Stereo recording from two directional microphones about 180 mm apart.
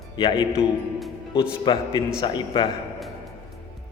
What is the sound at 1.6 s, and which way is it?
A man's voice, 25° left (ahead or behind).